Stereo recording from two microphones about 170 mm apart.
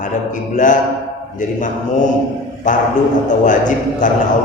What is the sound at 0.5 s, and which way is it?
Speech, 50° left (ahead or behind).